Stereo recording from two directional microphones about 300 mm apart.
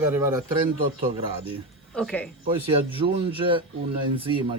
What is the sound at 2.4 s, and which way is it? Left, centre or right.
Speech, centre.